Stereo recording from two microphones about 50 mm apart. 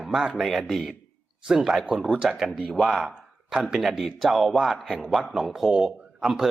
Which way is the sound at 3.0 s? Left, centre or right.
Centre.